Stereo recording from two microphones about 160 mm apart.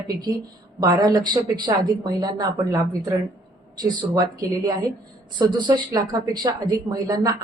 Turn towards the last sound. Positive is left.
turn(degrees=-25)  # may be behind; listen again after turning